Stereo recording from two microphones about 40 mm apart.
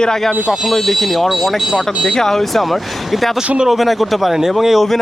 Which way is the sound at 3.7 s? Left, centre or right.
Centre.